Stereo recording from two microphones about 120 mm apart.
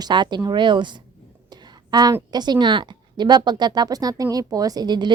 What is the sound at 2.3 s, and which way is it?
A woman's voice, 35° right (ahead or behind).